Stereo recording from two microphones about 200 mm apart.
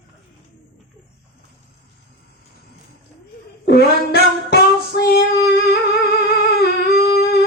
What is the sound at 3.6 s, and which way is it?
Child singing, 55° left (ahead or behind).